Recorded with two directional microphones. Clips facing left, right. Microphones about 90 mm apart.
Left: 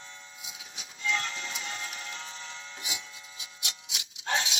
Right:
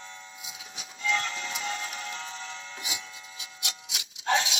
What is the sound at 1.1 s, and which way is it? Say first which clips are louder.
Music: right 3 dB; 40° right (ahead or behind).